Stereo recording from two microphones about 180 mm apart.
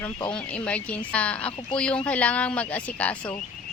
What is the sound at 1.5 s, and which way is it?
Speech, 30° left (ahead or behind).